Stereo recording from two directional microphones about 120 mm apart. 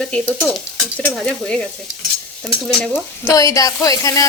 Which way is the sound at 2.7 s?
5° left (ahead or behind).